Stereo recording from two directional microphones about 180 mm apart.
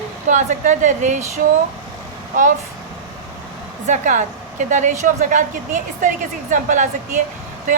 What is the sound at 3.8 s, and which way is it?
A woman's voice, 45° right (ahead or behind).